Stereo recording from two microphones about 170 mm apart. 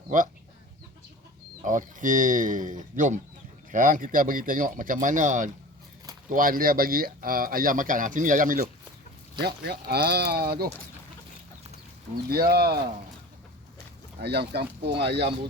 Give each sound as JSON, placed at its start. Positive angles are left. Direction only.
{"t": 1.6, "sound": "speech", "side_deg": -50}
{"t": 9.6, "sound": "speech", "side_deg": -70}
{"t": 12.1, "sound": "speech", "side_deg": -65}
{"t": 14.2, "sound": "speech", "side_deg": -75}